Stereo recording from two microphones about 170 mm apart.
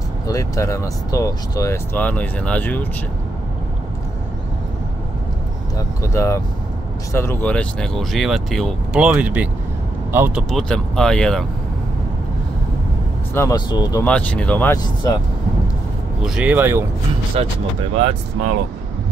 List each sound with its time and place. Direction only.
0.3 s speech: 20° left (ahead or behind)
5.8 s speech: 15° left (ahead or behind); by 10.4 s 10° right (ahead or behind)
10.5 s speech: 5° left (ahead or behind)
13.3 s speech: 15° left (ahead or behind)
14.0 s speech: 5° left (ahead or behind)
16.3 s speech: 5° right (ahead or behind)
17.4 s speech: 35° right (ahead or behind)